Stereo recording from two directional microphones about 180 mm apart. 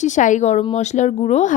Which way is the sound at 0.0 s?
45° left (ahead or behind).